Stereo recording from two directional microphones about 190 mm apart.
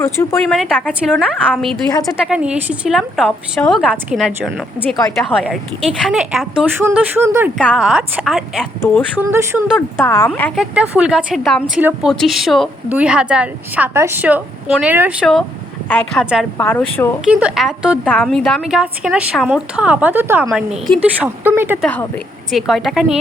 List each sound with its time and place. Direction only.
0.0 s a woman's voice: 15° left (ahead or behind)
0.4 s a woman's voice: centre (ahead or behind)
1.9 s speech: 20° left (ahead or behind)
2.2 s a woman's voice: 5° right (ahead or behind)
7.6 s a woman's voice: centre (ahead or behind)
9.1 s a woman's voice: 10° right (ahead or behind)
9.7 s a woman's voice: 10° left (ahead or behind)
10.6 s a woman's voice: 5° right (ahead or behind)
15.9 s a woman's voice: 10° left (ahead or behind)
17.2 s a woman's voice: 5° right (ahead or behind)
21.8 s a woman's voice: 5° left (ahead or behind)